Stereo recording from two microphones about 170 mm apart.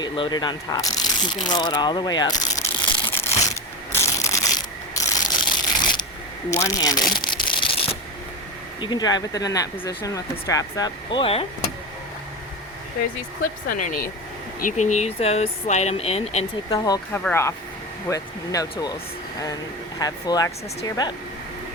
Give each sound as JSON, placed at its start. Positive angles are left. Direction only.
{"t": 0.0, "sound": "speech", "side_deg": 25}
{"t": 3.9, "sound": "pulleys", "side_deg": 15}
{"t": 6.5, "sound": "speech", "side_deg": 20}
{"t": 8.8, "sound": "speech", "side_deg": 25}
{"t": 13.7, "sound": "speech", "side_deg": 50}
{"t": 16.6, "sound": "speech", "side_deg": 20}
{"t": 20.0, "sound": "speech", "side_deg": 20}